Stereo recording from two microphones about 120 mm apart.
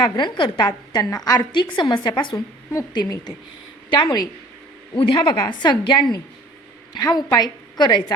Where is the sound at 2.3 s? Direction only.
25° left (ahead or behind).